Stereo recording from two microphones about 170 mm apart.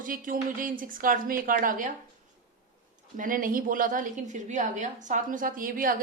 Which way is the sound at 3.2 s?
55° right (ahead or behind).